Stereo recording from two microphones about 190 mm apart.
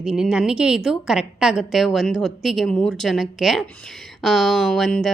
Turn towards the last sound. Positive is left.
turn(degrees=0)  # may be behind; listen again after turning